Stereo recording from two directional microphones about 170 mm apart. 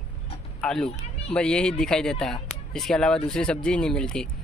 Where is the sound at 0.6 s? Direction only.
5° left (ahead or behind).